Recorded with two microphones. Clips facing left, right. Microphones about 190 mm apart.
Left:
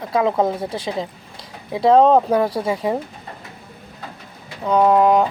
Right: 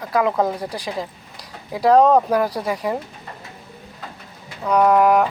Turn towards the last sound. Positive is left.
turn(degrees=25)  # may be behind; listen again after turning